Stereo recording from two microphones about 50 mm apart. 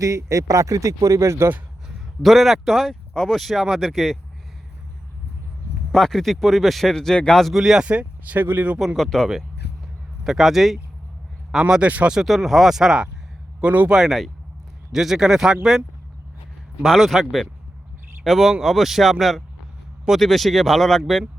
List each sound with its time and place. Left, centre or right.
0.0 s speech: right
1.9 s speech: centre
5.9 s speech: centre
7.5 s speech: centre
7.8 s speech: right
8.4 s speech: right
9.0 s speech: centre
10.2 s speech: centre
11.8 s speech: right
12.2 s speech: centre
13.6 s speech: right
14.9 s speech: centre
16.8 s speech: centre